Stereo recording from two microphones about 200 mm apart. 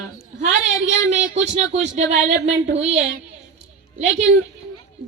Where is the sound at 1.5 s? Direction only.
35° right (ahead or behind).